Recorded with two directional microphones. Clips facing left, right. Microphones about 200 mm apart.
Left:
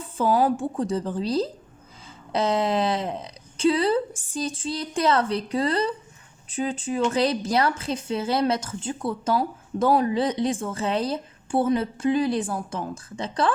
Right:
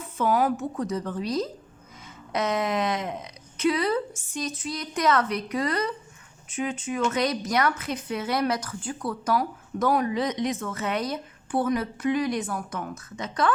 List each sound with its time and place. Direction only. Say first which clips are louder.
0.0 s a woman's voice: left 2 dB; 30° left (ahead or behind)